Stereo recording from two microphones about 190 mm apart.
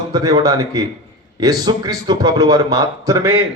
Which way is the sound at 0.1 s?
20° right (ahead or behind).